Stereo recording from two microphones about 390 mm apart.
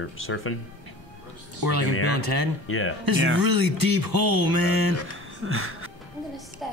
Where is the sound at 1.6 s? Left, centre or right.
Right.